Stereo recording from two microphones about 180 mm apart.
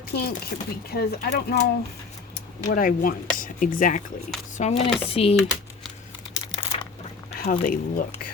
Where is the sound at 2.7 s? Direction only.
50° left (ahead or behind); by 5.3 s 30° left (ahead or behind).